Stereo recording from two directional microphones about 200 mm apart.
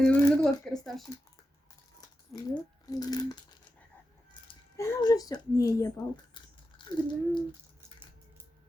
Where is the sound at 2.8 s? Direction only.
20° left (ahead or behind).